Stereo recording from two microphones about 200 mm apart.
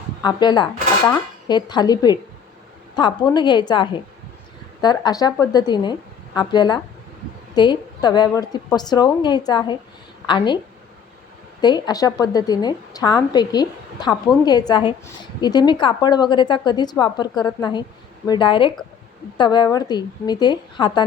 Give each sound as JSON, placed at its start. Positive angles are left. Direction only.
{"t": 0.2, "sound": "a woman's voice", "side_deg": 20}
{"t": 11.6, "sound": "a woman's voice", "side_deg": 20}